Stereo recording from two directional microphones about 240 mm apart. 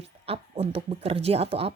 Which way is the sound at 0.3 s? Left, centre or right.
Right.